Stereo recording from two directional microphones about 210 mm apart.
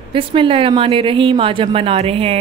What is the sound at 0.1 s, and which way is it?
Speech, 25° right (ahead or behind).